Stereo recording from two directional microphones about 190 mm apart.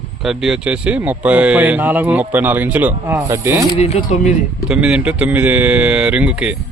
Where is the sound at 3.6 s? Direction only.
35° left (ahead or behind).